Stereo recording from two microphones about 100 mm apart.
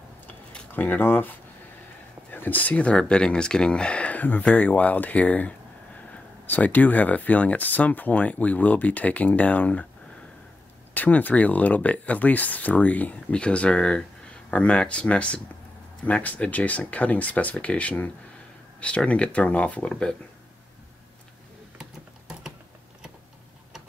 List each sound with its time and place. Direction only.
0.3 s keys jangling: 15° left (ahead or behind)
2.3 s speech: 20° left (ahead or behind)
11.0 s speech: 15° left (ahead or behind)